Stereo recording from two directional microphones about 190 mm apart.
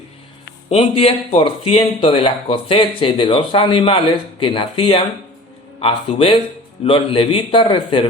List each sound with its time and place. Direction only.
0.7 s speech: 30° left (ahead or behind)